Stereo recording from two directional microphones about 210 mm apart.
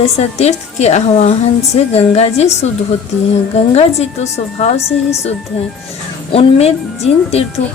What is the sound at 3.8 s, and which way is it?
Speech, 30° left (ahead or behind).